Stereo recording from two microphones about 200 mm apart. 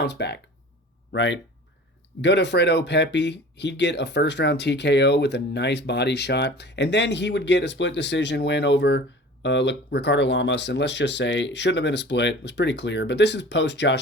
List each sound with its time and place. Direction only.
0.0 s speech: 60° left (ahead or behind)